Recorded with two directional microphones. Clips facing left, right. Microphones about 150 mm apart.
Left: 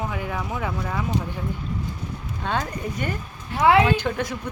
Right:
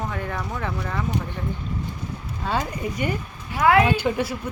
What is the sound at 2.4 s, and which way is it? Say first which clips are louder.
Speech: right 1 dB; 5° right (ahead or behind).